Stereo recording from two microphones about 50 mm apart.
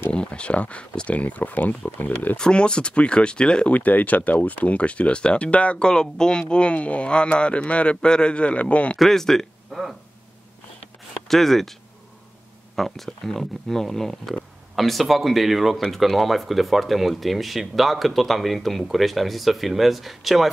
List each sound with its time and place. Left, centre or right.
0.1 s speech: left
2.3 s speech: centre
3.7 s speech: left
8.9 s speech: centre
11.2 s speech: centre
12.7 s speech: centre